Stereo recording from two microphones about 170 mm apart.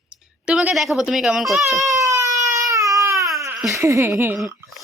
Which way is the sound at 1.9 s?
20° right (ahead or behind).